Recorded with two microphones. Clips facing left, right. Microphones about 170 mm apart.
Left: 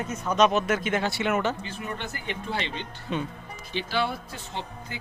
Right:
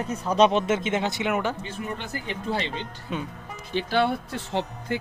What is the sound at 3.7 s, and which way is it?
Speech, 50° right (ahead or behind).